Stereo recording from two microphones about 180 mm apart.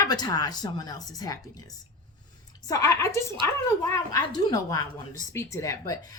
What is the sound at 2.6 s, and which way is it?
A woman's voice, 15° left (ahead or behind).